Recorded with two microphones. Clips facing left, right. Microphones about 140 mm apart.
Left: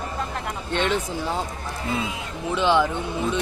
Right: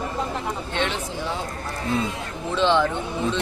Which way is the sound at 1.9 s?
Centre (ahead or behind).